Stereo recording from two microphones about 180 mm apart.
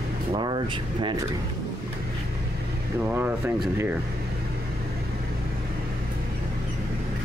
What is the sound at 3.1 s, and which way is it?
Speech, 10° right (ahead or behind).